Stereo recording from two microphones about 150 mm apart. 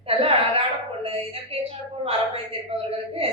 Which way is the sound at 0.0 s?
40° right (ahead or behind).